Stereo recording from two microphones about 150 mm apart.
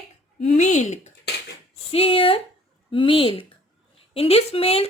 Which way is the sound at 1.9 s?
40° left (ahead or behind).